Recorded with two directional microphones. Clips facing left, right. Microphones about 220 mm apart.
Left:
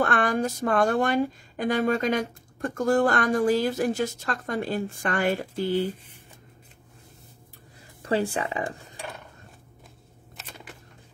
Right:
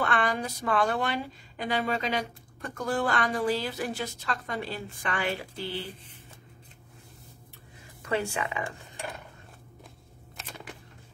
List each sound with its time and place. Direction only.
0.0 s speech: 45° left (ahead or behind)
8.0 s speech: 35° left (ahead or behind)